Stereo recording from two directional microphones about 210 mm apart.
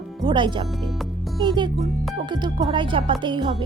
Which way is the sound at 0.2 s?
20° right (ahead or behind).